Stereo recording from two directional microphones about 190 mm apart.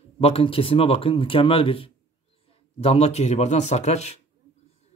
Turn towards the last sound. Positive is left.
turn(degrees=35)  # may be behind; listen again after turning